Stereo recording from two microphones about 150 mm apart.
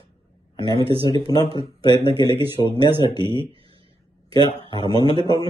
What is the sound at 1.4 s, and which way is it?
Speech, 35° right (ahead or behind).